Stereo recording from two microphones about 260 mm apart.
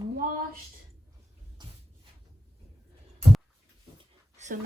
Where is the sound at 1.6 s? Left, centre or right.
Centre.